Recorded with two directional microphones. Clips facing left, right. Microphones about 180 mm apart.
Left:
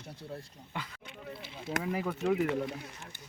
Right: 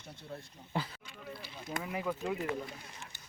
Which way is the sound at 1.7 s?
80° left.